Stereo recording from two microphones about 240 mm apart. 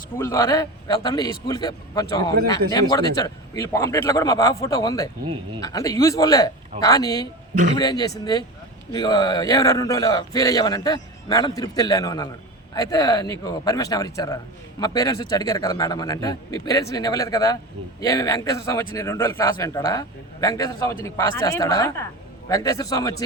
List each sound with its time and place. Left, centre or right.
0.2 s a man's voice: centre